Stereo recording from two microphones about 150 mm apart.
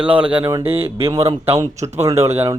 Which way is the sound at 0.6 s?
40° right (ahead or behind).